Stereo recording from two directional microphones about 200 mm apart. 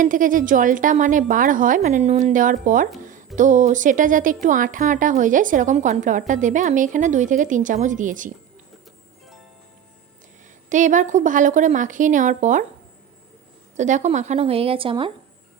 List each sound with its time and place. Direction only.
0.0 s speech: 40° right (ahead or behind)
3.0 s music: 40° right (ahead or behind)
3.3 s speech: 40° right (ahead or behind)
10.7 s speech: 40° right (ahead or behind)
13.7 s speech: 35° right (ahead or behind)